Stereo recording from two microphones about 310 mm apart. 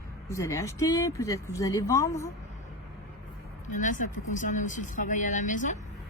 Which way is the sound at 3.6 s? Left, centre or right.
Left.